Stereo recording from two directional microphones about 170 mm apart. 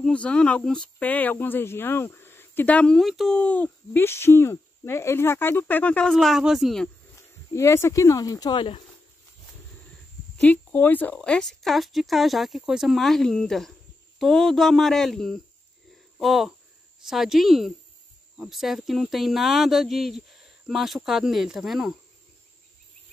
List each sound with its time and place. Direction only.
0.0 s speech: 5° left (ahead or behind)
7.2 s speech: 15° left (ahead or behind)
10.3 s speech: 10° left (ahead or behind)